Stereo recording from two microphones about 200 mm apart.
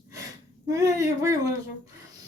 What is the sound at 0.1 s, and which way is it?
Gasp, 15° right (ahead or behind).